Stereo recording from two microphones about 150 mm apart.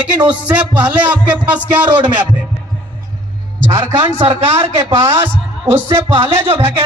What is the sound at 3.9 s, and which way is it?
Speech, 40° right (ahead or behind).